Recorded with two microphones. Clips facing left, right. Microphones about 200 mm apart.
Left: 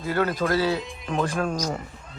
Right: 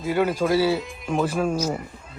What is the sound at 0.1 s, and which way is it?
Speech, 10° right (ahead or behind).